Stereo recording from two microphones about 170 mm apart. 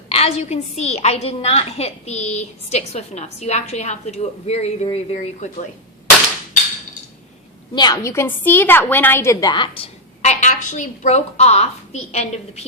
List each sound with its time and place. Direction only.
0.1 s a woman's voice: 40° left (ahead or behind)
7.8 s a woman's voice: 20° left (ahead or behind)
10.4 s a woman's voice: 50° left (ahead or behind)